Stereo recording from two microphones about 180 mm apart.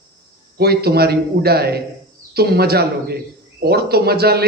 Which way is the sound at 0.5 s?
60° right (ahead or behind).